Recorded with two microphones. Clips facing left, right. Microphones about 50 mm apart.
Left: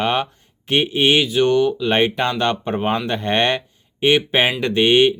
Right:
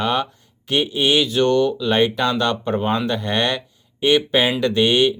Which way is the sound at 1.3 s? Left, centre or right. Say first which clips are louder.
Left 1 dB; centre.